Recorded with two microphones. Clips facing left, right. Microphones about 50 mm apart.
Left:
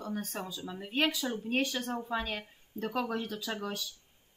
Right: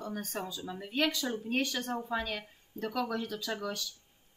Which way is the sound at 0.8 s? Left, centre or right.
Centre.